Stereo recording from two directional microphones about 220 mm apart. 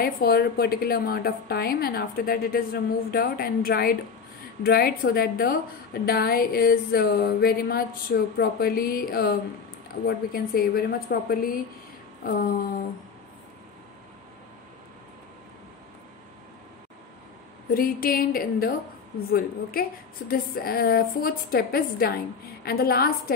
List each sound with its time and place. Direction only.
0.0 s a woman's voice: 45° left (ahead or behind)
17.7 s a sound: 40° left (ahead or behind)
19.3 s a woman's voice: 40° left (ahead or behind)